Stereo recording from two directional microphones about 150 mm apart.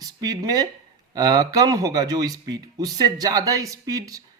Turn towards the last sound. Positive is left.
turn(degrees=-25)  # may be behind; listen again after turning